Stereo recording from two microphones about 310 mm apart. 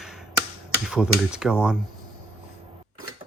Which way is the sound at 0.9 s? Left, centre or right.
Centre.